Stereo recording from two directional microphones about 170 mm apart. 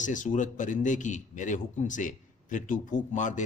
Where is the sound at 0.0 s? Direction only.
50° left (ahead or behind).